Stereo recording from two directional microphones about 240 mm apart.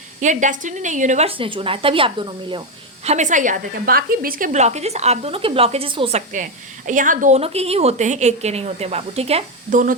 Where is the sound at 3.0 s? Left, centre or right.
Right.